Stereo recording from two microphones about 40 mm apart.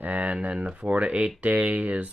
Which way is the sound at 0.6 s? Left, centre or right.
Right.